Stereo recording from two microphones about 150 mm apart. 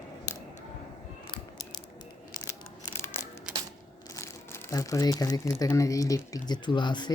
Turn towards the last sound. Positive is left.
turn(degrees=30)  # may be behind; listen again after turning